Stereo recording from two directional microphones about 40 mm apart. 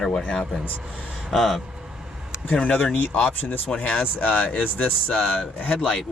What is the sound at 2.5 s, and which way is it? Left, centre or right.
Speech, left.